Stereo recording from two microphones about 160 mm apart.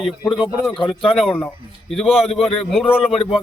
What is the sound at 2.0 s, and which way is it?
Speech, 35° left (ahead or behind).